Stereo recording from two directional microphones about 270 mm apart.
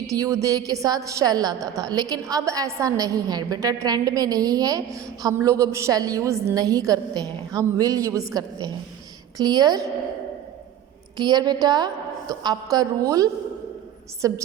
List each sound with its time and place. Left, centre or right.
0.1 s a woman's voice: centre
11.2 s a woman's voice: centre